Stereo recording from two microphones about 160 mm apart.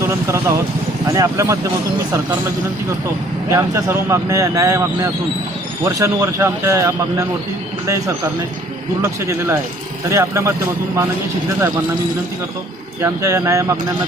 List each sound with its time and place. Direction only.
0.0 s speech: 20° right (ahead or behind)
3.5 s speech: 20° right (ahead or behind)
10.1 s speech: 15° right (ahead or behind)
13.0 s speech: 20° right (ahead or behind)